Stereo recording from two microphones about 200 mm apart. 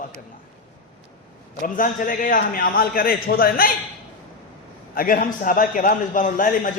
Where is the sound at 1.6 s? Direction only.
45° left (ahead or behind).